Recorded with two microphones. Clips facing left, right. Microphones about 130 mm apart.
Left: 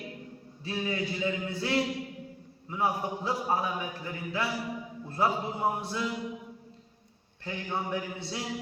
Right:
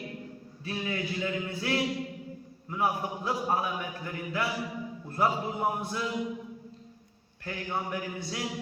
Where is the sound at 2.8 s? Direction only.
30° left (ahead or behind).